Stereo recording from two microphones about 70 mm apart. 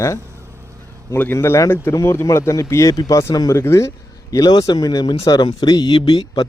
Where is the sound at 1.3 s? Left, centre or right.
Left.